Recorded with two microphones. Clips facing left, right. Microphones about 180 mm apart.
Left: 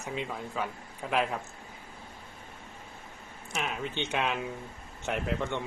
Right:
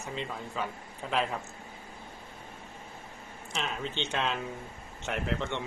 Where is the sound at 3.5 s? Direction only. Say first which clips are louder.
Left 1 dB; 10° left (ahead or behind).